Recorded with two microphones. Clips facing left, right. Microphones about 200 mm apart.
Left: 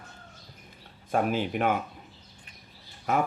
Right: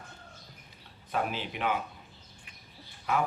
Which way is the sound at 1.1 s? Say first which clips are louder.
Left 7 dB; 50° left (ahead or behind).